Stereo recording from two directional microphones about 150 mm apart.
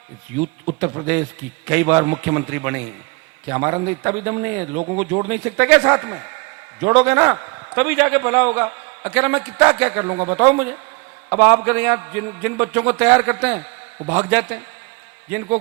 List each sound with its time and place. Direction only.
0.3 s a man's voice: 15° right (ahead or behind)